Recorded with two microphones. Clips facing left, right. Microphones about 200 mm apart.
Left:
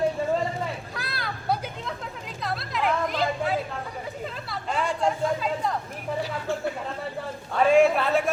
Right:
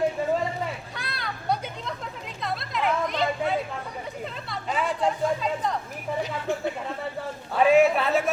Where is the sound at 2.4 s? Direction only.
Centre (ahead or behind).